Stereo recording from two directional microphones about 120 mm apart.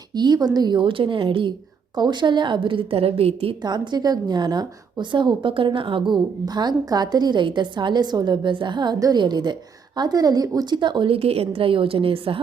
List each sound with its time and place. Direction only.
0.1 s a woman's voice: 35° right (ahead or behind); by 3.5 s 55° right (ahead or behind)
3.6 s a woman's voice: 35° right (ahead or behind)